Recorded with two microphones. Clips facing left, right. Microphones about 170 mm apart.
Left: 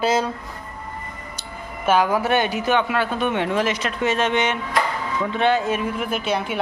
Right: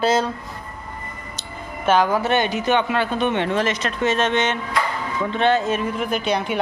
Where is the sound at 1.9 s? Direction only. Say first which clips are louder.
Right 1 dB; 10° left (ahead or behind).